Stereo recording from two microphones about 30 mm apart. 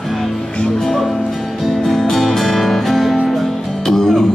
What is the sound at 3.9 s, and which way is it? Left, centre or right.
Music, centre.